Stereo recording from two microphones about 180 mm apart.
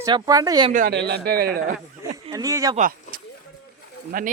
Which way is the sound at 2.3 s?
20° right (ahead or behind).